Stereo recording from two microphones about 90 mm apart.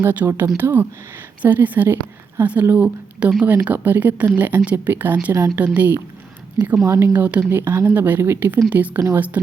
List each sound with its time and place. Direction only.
0.0 s speech: 25° right (ahead or behind)